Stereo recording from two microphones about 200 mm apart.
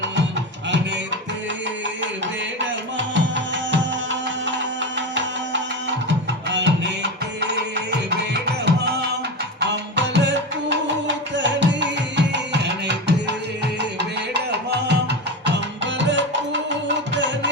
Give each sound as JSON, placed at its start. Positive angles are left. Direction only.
{"t": 2.2, "sound": "music", "side_deg": -65}
{"t": 14.7, "sound": "music", "side_deg": -55}